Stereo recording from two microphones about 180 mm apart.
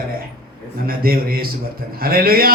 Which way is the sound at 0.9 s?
55° right (ahead or behind).